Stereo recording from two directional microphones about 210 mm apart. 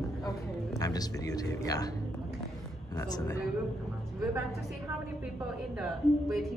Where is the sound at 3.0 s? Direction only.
15° left (ahead or behind).